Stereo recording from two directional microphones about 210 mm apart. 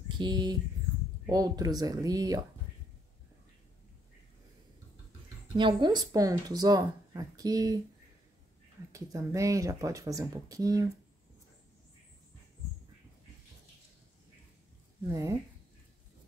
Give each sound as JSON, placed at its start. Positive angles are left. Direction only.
{"t": 0.2, "sound": "speech", "side_deg": -20}
{"t": 5.6, "sound": "speech", "side_deg": -20}
{"t": 8.9, "sound": "speech", "side_deg": -15}
{"t": 15.0, "sound": "speech", "side_deg": -15}